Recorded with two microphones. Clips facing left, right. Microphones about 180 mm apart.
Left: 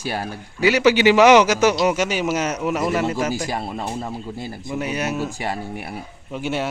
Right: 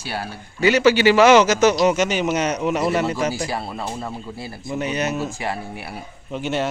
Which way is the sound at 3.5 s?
20° left (ahead or behind).